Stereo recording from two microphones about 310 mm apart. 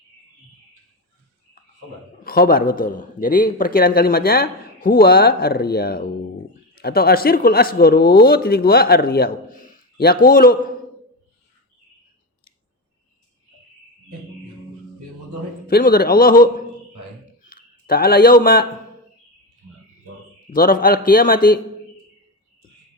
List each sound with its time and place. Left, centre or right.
2.2 s speech: left
15.6 s speech: left
20.5 s speech: left